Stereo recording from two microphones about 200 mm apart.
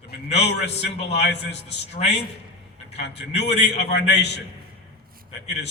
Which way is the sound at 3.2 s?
55° left (ahead or behind).